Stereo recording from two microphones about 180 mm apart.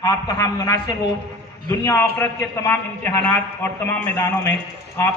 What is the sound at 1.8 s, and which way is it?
A man's voice, 15° left (ahead or behind).